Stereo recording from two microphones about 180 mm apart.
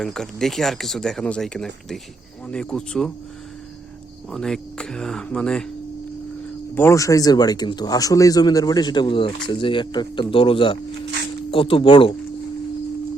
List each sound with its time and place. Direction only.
0.0 s speech: 5° left (ahead or behind)
4.3 s speech: 5° left (ahead or behind)
6.7 s speech: 15° left (ahead or behind)